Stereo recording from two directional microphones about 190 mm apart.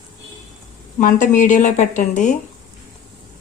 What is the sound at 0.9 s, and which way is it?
Speech, 45° left (ahead or behind).